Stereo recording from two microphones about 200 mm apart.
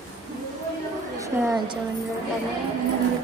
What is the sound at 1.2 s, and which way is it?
Speech, 15° right (ahead or behind).